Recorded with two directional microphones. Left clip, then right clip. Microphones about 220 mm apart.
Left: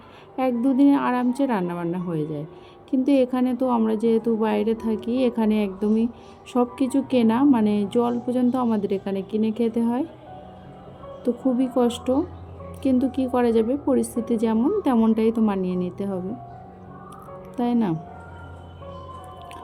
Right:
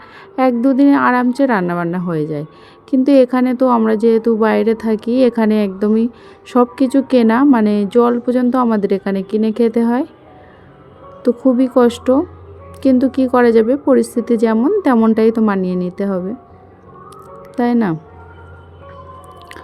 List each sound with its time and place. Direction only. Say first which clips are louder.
0.3 s speech: right 8 dB; 25° right (ahead or behind)
11.2 s speech: right 10 dB; 20° right (ahead or behind)
17.6 s speech: right 8 dB; 25° right (ahead or behind)